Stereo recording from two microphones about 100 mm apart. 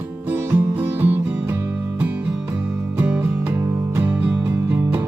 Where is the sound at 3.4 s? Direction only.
25° right (ahead or behind).